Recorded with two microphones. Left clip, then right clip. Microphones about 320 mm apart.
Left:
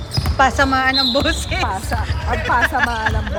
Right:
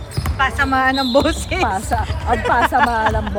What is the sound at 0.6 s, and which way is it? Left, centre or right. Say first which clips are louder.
Speech: left 1 dB; centre.